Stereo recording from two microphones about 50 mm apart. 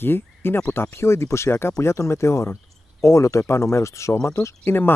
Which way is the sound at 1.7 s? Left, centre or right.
Left.